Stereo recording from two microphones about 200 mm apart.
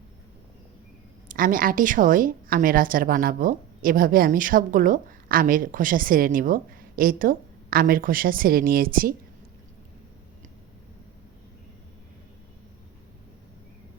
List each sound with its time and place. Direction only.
1.3 s a woman's voice: 45° right (ahead or behind)